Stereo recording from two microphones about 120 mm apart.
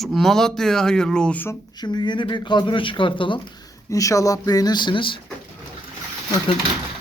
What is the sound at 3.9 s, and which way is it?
Speech, 30° left (ahead or behind).